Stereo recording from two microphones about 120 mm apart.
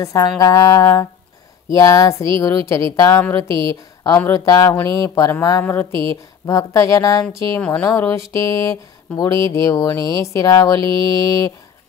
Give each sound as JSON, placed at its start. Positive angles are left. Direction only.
{"t": 0.0, "sound": "speech", "side_deg": 25}
{"t": 3.4, "sound": "a woman's voice", "side_deg": -45}
{"t": 4.3, "sound": "speech", "side_deg": 25}
{"t": 5.9, "sound": "a woman's voice", "side_deg": -45}
{"t": 6.4, "sound": "speech", "side_deg": 25}